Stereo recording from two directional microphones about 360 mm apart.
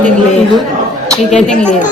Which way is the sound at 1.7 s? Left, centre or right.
Left.